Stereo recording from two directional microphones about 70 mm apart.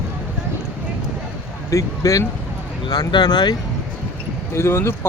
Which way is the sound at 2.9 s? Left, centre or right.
Left.